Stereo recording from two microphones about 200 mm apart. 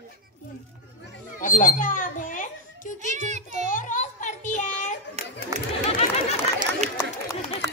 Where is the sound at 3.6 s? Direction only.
40° left (ahead or behind).